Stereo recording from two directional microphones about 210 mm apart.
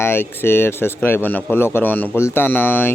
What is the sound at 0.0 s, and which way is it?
Speech, 10° left (ahead or behind).